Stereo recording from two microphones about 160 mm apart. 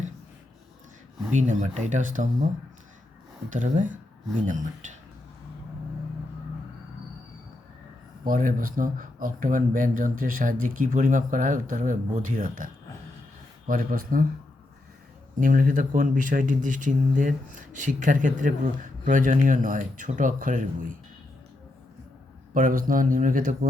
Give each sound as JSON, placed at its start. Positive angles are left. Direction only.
{"t": 1.3, "sound": "speech", "side_deg": -50}
{"t": 3.5, "sound": "speech", "side_deg": -55}
{"t": 8.2, "sound": "speech", "side_deg": -60}
{"t": 15.4, "sound": "speech", "side_deg": -60}
{"t": 22.5, "sound": "speech", "side_deg": -60}